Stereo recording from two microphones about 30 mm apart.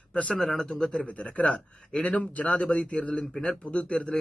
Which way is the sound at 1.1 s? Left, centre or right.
Left.